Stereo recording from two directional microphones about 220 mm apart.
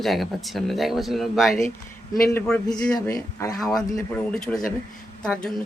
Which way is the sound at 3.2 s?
15° left (ahead or behind).